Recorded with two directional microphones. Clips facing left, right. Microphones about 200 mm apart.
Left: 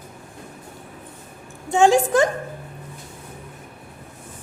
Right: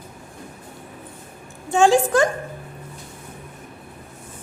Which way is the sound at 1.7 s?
20° left (ahead or behind).